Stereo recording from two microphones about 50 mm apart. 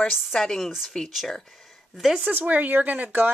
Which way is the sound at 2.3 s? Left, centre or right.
Right.